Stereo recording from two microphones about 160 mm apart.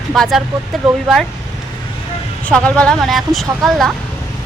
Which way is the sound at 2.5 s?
5° left (ahead or behind).